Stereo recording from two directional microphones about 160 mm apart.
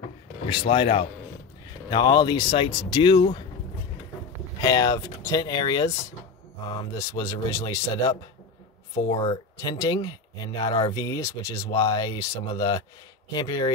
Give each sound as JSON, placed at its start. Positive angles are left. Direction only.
{"t": 0.5, "sound": "speech", "side_deg": 30}
{"t": 4.6, "sound": "speech", "side_deg": 25}
{"t": 9.1, "sound": "speech", "side_deg": 35}
{"t": 11.0, "sound": "speech", "side_deg": 20}